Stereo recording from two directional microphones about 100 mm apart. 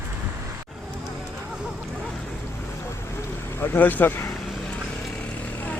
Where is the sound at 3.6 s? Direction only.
20° left (ahead or behind).